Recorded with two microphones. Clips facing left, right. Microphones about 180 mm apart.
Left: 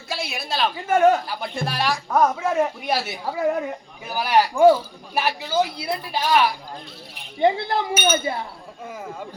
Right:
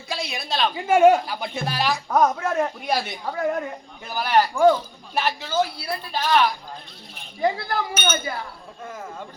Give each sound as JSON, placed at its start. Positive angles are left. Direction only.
{"t": 0.1, "sound": "speech", "side_deg": 5}
{"t": 0.9, "sound": "speech", "side_deg": -10}
{"t": 7.3, "sound": "speech", "side_deg": 25}